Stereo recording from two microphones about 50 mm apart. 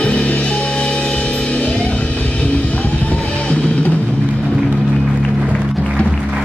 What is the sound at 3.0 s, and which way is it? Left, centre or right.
Music, left.